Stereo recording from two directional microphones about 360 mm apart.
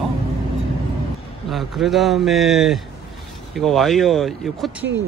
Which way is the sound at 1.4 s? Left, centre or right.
Centre.